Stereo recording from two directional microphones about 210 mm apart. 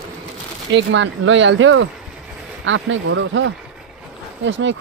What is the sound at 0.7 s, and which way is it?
Speech, 60° right (ahead or behind).